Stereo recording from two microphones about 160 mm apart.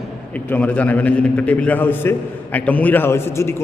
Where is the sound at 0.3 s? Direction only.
10° left (ahead or behind).